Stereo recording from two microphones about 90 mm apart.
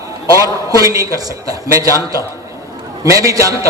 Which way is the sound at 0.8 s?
40° right (ahead or behind).